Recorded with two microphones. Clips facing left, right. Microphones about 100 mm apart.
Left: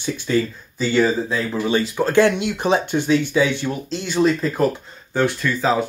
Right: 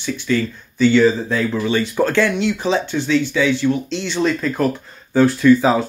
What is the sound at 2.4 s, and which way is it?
Speech, 55° left (ahead or behind).